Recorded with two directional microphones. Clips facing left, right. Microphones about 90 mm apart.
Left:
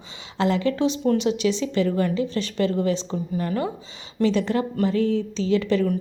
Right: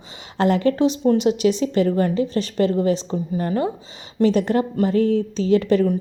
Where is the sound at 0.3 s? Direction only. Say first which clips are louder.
Right 4 dB; 50° right (ahead or behind).